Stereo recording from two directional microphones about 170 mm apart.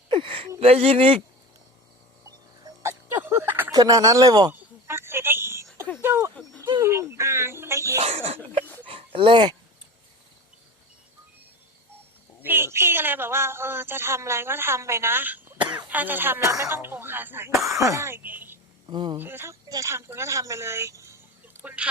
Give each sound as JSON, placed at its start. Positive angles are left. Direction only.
{"t": 0.1, "sound": "a sound", "side_deg": -30}
{"t": 0.6, "sound": "speech", "side_deg": -35}
{"t": 2.6, "sound": "music", "side_deg": -15}
{"t": 3.8, "sound": "speech", "side_deg": -20}
{"t": 4.5, "sound": "a sound", "side_deg": -15}
{"t": 8.0, "sound": "a sound", "side_deg": -35}
{"t": 12.4, "sound": "speech", "side_deg": -15}
{"t": 18.9, "sound": "speech", "side_deg": -25}
{"t": 19.2, "sound": "speech", "side_deg": -15}